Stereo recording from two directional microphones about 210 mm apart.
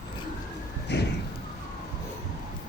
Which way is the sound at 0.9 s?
55° left (ahead or behind).